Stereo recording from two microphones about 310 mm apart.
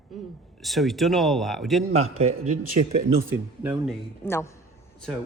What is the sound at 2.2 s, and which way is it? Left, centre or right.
Speech, right.